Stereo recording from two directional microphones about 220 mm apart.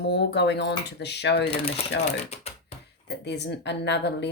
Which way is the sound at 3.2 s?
50° left (ahead or behind).